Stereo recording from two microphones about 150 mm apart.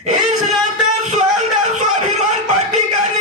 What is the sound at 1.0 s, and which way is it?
Music, 50° right (ahead or behind).